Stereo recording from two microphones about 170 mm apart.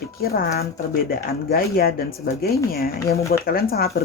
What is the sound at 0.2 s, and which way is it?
Speech, 65° left (ahead or behind).